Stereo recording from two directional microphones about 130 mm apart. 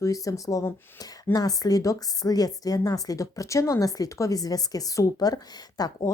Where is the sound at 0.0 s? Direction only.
25° left (ahead or behind).